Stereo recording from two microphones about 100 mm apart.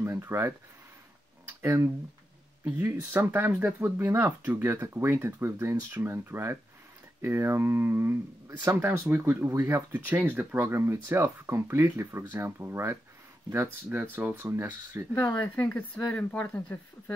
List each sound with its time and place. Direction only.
0.0 s speech: 25° right (ahead or behind)
1.6 s speech: 25° right (ahead or behind)
14.1 s speech: 20° right (ahead or behind)
15.3 s speech: 20° left (ahead or behind)